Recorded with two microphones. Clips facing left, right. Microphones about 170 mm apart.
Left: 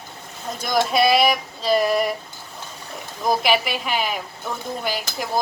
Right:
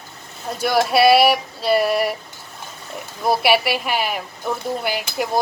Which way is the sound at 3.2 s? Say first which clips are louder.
Right 3 dB; 5° right (ahead or behind).